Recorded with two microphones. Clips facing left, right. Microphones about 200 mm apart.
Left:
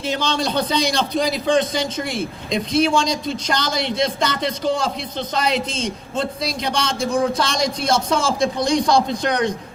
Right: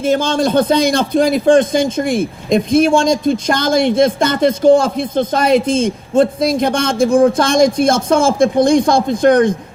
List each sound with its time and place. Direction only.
0.0 s a man's voice: 50° right (ahead or behind)